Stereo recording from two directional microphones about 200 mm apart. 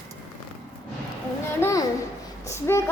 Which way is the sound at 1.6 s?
10° left (ahead or behind).